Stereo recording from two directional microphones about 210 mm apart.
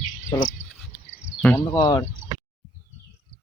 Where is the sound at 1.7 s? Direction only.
20° left (ahead or behind).